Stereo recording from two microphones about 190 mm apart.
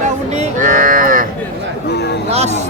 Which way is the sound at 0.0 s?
40° right (ahead or behind).